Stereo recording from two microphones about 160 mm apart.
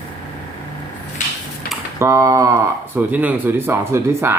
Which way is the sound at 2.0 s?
20° right (ahead or behind).